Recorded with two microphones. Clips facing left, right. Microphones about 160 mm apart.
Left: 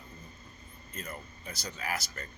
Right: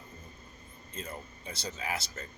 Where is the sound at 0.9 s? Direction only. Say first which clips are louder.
Right 1 dB; 25° right (ahead or behind).